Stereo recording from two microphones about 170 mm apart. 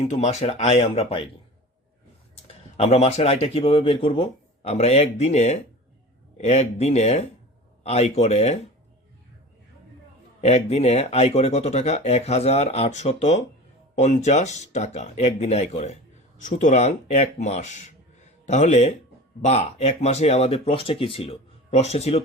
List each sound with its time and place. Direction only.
0.1 s speech: 40° left (ahead or behind)
2.7 s speech: 40° left (ahead or behind)
10.4 s speech: 40° left (ahead or behind)